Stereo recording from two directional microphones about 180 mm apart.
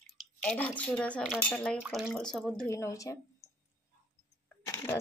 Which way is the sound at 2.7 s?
15° left (ahead or behind).